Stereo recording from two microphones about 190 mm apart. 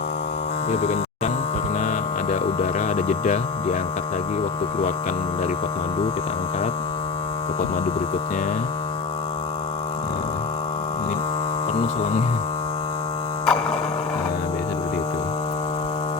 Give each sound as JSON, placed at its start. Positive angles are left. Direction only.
{"t": 0.7, "sound": "speech", "side_deg": 35}
{"t": 2.3, "sound": "a sound", "side_deg": 40}
{"t": 13.4, "sound": "mains hum", "side_deg": 5}